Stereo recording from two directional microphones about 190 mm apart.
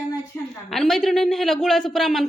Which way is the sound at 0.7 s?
Centre (ahead or behind).